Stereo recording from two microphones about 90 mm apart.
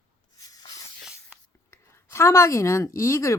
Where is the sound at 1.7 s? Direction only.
30° left (ahead or behind).